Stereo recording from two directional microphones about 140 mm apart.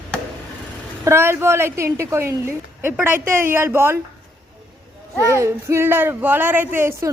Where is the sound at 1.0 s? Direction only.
20° right (ahead or behind).